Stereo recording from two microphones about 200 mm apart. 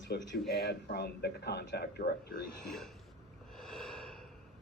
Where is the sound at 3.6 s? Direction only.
Centre (ahead or behind).